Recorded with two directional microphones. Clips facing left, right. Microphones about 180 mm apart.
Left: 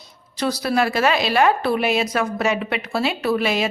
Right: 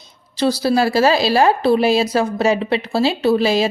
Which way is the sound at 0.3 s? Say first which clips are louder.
Right 4 dB; 30° right (ahead or behind).